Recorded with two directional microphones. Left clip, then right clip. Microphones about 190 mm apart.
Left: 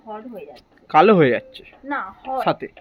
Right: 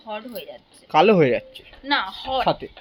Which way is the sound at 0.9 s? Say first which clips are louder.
Left 2 dB; 5° left (ahead or behind).